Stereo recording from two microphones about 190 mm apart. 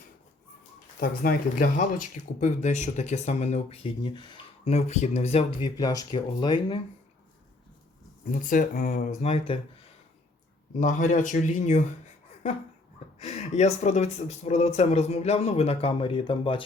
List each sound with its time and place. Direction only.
0.9 s speech: 50° left (ahead or behind); by 5.5 s 35° left (ahead or behind)
5.5 s speech: 20° left (ahead or behind)
8.3 s speech: 45° left (ahead or behind)
10.8 s speech: 40° left (ahead or behind)
13.1 s speech: 35° left (ahead or behind)